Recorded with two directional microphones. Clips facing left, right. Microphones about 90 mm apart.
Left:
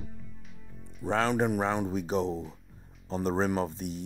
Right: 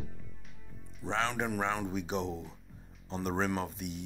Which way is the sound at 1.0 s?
45° left (ahead or behind).